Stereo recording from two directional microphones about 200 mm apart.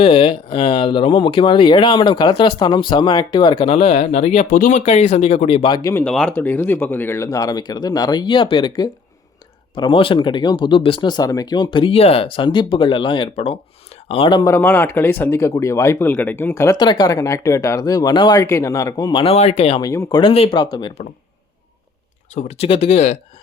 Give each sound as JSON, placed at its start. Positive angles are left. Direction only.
{"t": 0.0, "sound": "speech", "side_deg": 25}
{"t": 19.9, "sound": "speech", "side_deg": 15}
{"t": 22.4, "sound": "speech", "side_deg": 30}